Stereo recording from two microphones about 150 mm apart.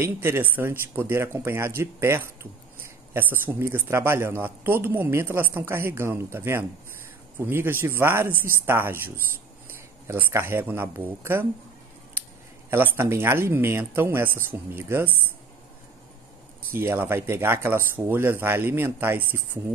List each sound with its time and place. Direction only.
0.0 s speech: 15° right (ahead or behind)
16.7 s speech: 15° right (ahead or behind)